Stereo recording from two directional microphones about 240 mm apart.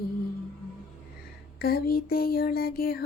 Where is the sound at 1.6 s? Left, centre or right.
Left.